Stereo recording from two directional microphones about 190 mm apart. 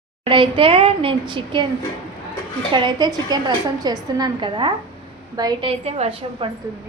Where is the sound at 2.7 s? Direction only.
25° right (ahead or behind).